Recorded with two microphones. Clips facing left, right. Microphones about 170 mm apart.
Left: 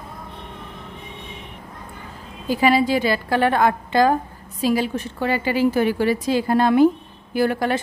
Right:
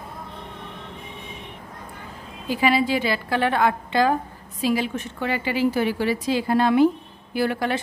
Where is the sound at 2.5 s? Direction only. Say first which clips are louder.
Left 3 dB; 40° left (ahead or behind).